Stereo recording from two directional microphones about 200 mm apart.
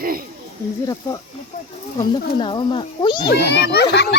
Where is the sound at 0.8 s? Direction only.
15° left (ahead or behind).